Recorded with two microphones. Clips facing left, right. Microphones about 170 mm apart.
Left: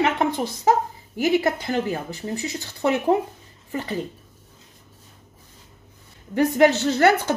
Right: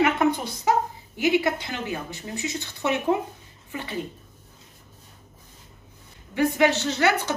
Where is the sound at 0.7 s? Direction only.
40° left (ahead or behind).